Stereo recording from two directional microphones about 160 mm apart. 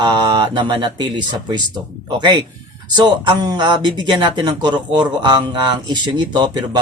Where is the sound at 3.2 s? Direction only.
25° right (ahead or behind).